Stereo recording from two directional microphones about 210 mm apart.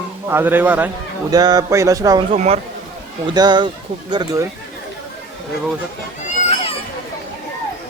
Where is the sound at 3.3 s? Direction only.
20° right (ahead or behind).